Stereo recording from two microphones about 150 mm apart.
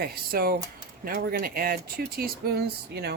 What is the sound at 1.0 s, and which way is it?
Speech, 75° right (ahead or behind).